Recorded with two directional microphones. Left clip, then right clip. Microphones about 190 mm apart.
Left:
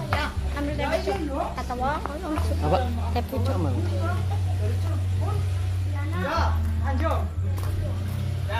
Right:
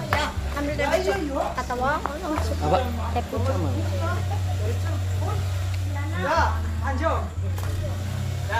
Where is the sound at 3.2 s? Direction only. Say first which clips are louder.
Right 1 dB; 30° left (ahead or behind).